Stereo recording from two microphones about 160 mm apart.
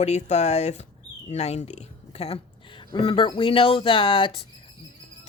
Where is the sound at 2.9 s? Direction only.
30° left (ahead or behind).